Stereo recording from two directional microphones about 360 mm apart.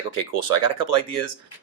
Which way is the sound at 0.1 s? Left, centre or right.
Left.